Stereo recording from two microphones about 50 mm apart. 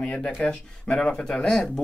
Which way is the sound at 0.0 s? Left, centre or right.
Left.